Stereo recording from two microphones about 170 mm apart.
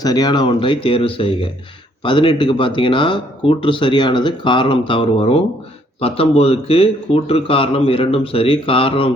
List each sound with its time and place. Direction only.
0.0 s speech: 25° left (ahead or behind)